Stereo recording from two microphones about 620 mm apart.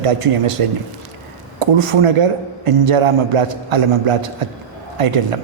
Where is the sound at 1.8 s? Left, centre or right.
Right.